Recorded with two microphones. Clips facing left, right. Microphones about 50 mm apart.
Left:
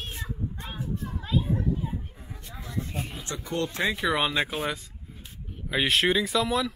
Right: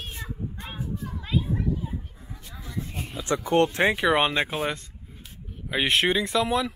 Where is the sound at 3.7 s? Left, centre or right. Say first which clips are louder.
Right 5 dB; right.